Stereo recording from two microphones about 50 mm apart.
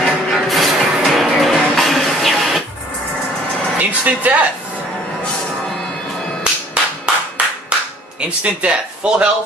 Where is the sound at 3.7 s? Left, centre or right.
Right.